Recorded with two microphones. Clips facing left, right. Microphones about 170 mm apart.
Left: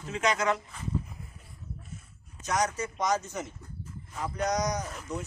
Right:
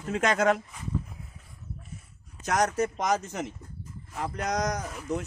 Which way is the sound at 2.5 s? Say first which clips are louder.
Right 3 dB; 55° right (ahead or behind).